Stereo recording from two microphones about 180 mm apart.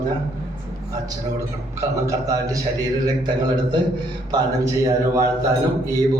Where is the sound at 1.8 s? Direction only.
20° right (ahead or behind).